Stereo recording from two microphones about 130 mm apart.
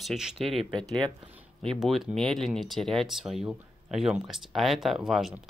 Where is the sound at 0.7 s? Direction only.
35° right (ahead or behind).